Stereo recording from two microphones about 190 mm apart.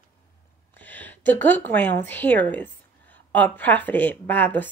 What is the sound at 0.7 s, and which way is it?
A woman's voice, 10° left (ahead or behind).